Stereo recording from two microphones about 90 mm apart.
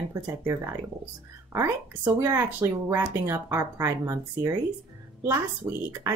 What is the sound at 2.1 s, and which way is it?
A woman's voice, 35° right (ahead or behind).